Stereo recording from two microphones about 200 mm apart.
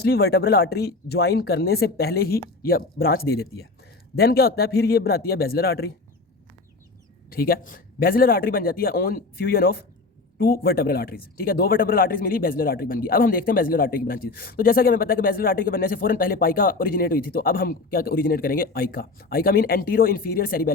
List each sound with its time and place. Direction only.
0.0 s speech: 55° left (ahead or behind)
7.3 s speech: 50° left (ahead or behind)